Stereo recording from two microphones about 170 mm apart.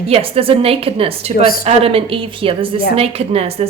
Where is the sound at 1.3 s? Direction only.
60° left (ahead or behind).